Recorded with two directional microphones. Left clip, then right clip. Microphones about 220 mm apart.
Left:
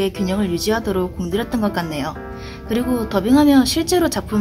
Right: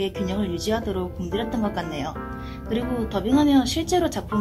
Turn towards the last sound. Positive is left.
turn(degrees=45)  # may be behind; listen again after turning